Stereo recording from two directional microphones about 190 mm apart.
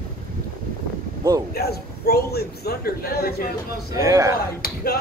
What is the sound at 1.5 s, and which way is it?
A man's voice, 55° left (ahead or behind).